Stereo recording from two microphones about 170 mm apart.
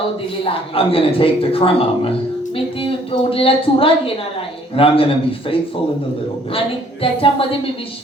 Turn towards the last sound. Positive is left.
turn(degrees=30)  # may be behind; listen again after turning